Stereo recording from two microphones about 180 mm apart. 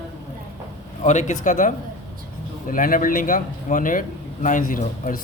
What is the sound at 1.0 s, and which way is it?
A man's voice, 40° left (ahead or behind).